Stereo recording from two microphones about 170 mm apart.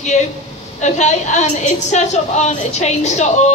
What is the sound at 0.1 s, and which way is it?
A woman's voice, 45° left (ahead or behind).